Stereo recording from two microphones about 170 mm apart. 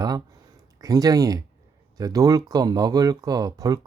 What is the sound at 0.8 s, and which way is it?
Speech, 20° right (ahead or behind).